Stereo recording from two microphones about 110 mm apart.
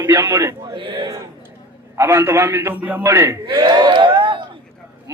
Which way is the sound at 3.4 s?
45° right (ahead or behind).